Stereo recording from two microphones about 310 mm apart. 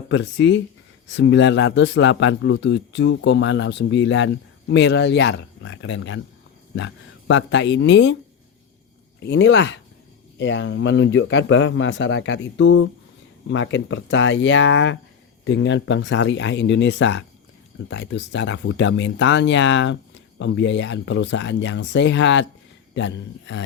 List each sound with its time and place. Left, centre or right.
0.1 s speech: left
9.2 s speech: left